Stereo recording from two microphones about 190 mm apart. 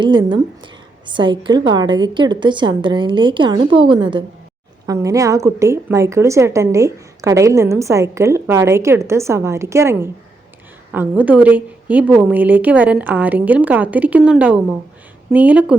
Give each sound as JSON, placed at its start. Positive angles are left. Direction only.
{"t": 0.0, "sound": "a woman's voice", "side_deg": -25}